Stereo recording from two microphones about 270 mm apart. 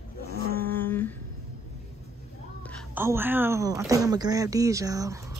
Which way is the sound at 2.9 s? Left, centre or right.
Centre.